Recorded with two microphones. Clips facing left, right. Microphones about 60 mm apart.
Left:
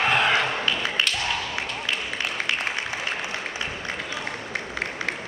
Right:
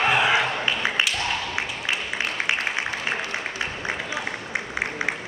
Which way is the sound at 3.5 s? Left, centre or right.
Centre.